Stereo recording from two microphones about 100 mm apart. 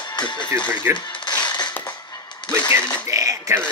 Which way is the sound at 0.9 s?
45° left (ahead or behind).